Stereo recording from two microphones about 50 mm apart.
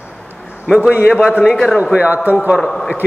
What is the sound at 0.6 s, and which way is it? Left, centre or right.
Speech, centre.